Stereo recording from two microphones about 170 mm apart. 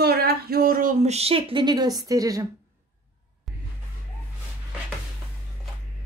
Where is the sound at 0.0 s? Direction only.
65° right (ahead or behind); by 2.4 s 20° right (ahead or behind).